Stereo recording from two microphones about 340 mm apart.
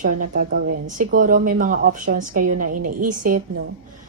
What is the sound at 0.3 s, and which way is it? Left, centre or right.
A woman's voice, right.